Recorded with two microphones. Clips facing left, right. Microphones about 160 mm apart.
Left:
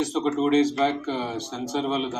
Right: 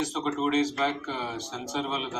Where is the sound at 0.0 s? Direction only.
30° left (ahead or behind).